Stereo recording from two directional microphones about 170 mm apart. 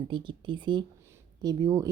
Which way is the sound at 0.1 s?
30° right (ahead or behind).